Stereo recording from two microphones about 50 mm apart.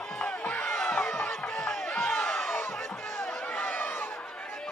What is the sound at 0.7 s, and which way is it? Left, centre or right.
Crowd, centre.